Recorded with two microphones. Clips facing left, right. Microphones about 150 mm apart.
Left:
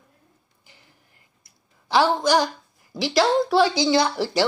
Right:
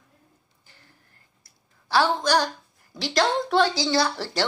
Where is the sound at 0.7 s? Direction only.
15° left (ahead or behind).